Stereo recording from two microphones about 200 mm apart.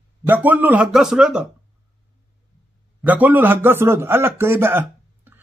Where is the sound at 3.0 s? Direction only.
10° right (ahead or behind).